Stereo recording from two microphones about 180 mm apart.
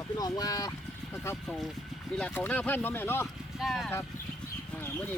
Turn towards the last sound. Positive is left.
turn(degrees=0)  # may be behind; listen again after turning